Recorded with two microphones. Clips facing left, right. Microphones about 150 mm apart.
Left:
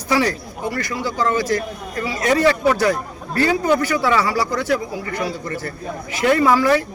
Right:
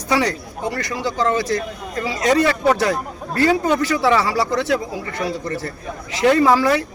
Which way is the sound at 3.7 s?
25° right (ahead or behind).